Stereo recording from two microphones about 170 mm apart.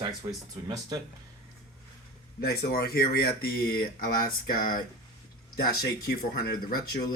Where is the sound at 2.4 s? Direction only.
65° left (ahead or behind).